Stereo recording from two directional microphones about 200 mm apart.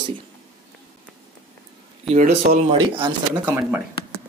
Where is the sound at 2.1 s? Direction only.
35° right (ahead or behind).